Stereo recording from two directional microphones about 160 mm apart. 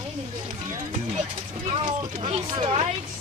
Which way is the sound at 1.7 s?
30° right (ahead or behind).